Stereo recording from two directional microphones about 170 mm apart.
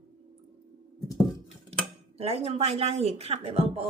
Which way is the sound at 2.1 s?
35° right (ahead or behind).